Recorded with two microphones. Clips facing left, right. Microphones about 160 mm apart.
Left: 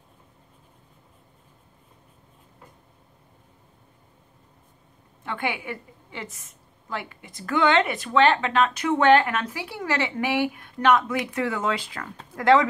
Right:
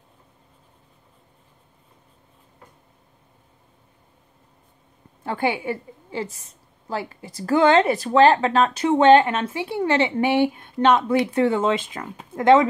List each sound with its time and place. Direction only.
5.2 s a woman's voice: 35° right (ahead or behind)